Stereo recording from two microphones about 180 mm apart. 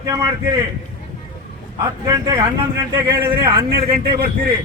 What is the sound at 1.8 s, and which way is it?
Speech, 20° right (ahead or behind).